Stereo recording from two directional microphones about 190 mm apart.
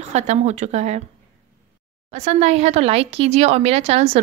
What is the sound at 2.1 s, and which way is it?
Speech, 35° right (ahead or behind).